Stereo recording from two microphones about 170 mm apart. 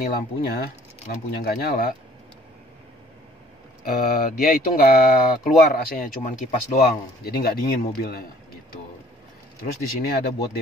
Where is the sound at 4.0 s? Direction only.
60° left (ahead or behind).